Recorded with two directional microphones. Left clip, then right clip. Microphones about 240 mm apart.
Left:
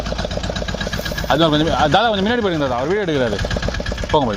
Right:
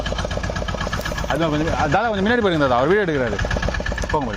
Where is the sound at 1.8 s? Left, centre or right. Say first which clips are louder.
Left 2 dB; centre.